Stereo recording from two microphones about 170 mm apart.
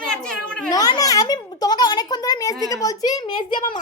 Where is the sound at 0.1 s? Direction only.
5° left (ahead or behind).